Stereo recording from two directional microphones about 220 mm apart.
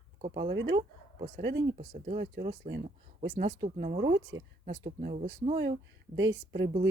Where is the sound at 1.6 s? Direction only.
30° right (ahead or behind).